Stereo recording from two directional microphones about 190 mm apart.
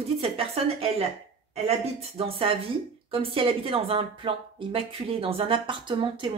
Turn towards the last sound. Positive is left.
turn(degrees=-25)  # may be behind; listen again after turning